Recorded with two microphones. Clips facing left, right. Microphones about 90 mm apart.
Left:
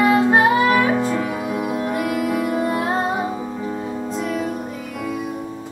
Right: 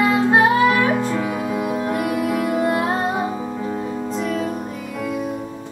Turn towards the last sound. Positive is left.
turn(degrees=10)  # may be behind; listen again after turning